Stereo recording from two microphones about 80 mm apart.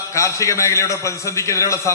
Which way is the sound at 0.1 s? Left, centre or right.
Left.